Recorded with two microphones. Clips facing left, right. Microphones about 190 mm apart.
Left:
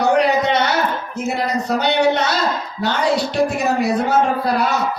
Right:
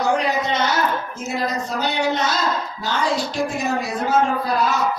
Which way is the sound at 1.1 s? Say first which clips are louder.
Left 4 dB; 65° left (ahead or behind).